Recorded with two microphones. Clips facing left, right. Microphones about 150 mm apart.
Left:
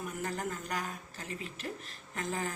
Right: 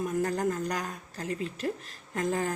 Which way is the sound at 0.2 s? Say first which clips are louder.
Right 8 dB; 40° right (ahead or behind).